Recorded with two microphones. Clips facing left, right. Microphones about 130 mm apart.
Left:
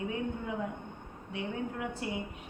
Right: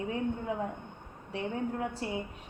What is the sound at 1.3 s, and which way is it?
Speech, 35° right (ahead or behind).